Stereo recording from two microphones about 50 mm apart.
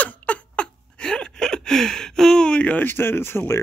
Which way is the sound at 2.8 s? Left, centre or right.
Left.